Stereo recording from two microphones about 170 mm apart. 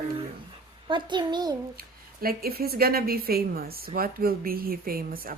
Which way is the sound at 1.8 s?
60° right (ahead or behind).